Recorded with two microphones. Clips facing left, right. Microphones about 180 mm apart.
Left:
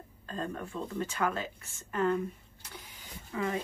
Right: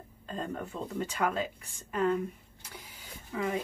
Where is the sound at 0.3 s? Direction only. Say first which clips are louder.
Even; 15° right (ahead or behind).